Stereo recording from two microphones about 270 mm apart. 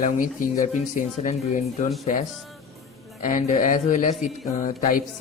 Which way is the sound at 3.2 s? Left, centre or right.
Left.